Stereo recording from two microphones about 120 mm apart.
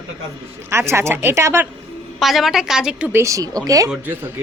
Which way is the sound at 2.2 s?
Centre (ahead or behind).